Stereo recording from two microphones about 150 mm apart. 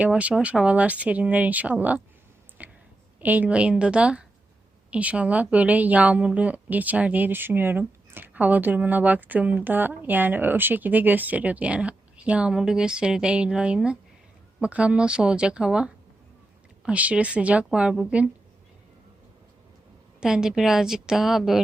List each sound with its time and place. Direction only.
0.0 s a woman's voice: 10° right (ahead or behind)
2.6 s a sound: 10° right (ahead or behind)
3.2 s a woman's voice: 10° right (ahead or behind)
20.2 s a woman's voice: 5° right (ahead or behind)